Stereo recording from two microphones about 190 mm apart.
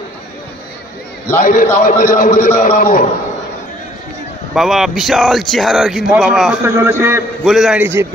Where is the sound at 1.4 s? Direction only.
45° left (ahead or behind).